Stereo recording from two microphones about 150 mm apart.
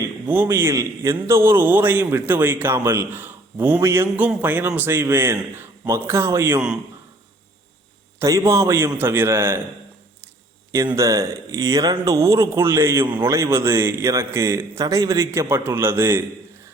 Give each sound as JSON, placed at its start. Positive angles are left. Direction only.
{"t": 0.0, "sound": "a man's voice", "side_deg": -15}
{"t": 8.2, "sound": "a man's voice", "side_deg": -20}
{"t": 10.8, "sound": "a man's voice", "side_deg": -20}